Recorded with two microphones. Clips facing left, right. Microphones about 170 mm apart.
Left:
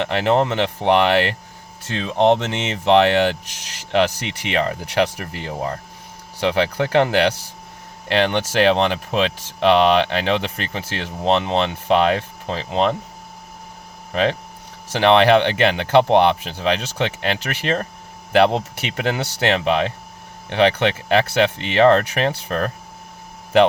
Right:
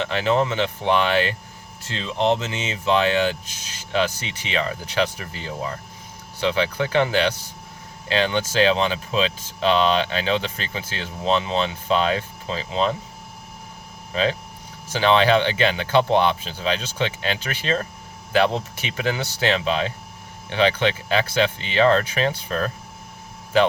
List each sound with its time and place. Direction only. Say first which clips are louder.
0.0 s speech: left 3 dB; 65° left (ahead or behind)
2.0 s speech: left 5 dB; 90° left; by 13.0 s 65° left (ahead or behind)
14.1 s speech: left 3 dB; 65° left (ahead or behind)